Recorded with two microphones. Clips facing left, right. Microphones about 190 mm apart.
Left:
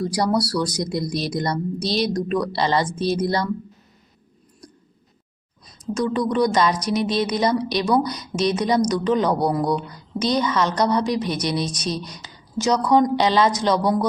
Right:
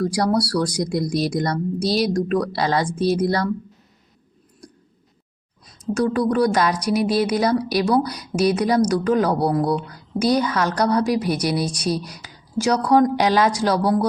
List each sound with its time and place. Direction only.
0.7 s speech: 10° right (ahead or behind)
5.8 s a woman's voice: 30° right (ahead or behind)
6.1 s speech: 5° right (ahead or behind)